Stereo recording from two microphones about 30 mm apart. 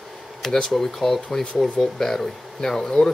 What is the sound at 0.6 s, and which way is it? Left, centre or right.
Speech, centre.